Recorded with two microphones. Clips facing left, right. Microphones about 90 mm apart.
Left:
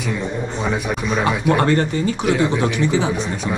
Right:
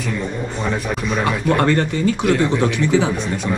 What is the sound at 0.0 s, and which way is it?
Speech, 5° left (ahead or behind).